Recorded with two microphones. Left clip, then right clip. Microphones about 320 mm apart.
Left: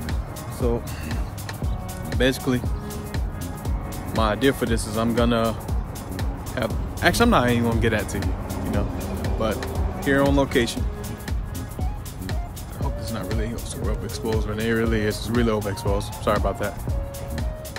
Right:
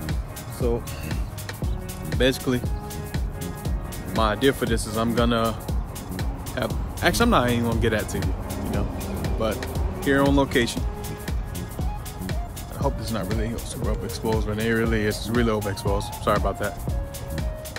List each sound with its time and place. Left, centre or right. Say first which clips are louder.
0.6 s speech: even; centre
4.1 s speech: even; centre
8.9 s music: left 1 dB; centre
10.5 s speech: left 1 dB; centre
13.4 s music: even; right
14.4 s speech: even; centre